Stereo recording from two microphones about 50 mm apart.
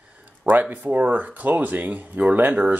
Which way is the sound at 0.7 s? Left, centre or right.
Right.